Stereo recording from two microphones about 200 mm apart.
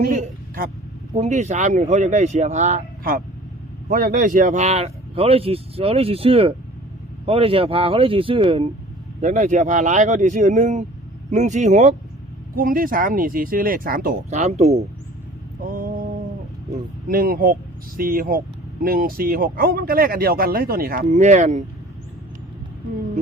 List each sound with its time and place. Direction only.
0.0 s a woman's voice: 45° right (ahead or behind); by 8.7 s 25° right (ahead or behind)
9.2 s speech: 35° right (ahead or behind)
15.6 s mantra: 45° right (ahead or behind)
16.7 s speech: 45° right (ahead or behind)
21.1 s speech: 35° right (ahead or behind)